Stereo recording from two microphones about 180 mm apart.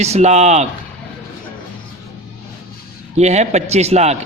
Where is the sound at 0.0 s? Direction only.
40° right (ahead or behind).